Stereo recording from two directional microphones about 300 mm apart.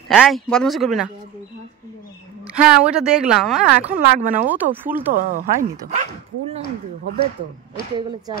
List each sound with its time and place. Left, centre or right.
0.1 s speech: centre
2.5 s speech: centre
3.9 s speech: right
4.5 s speech: centre
5.1 s speech: right